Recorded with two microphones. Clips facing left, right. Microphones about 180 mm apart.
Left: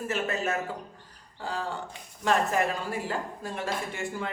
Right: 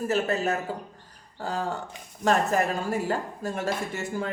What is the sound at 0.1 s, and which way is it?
Speech, 35° right (ahead or behind).